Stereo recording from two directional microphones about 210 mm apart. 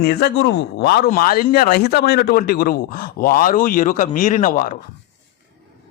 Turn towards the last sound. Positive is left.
turn(degrees=40)  # may be behind; listen again after turning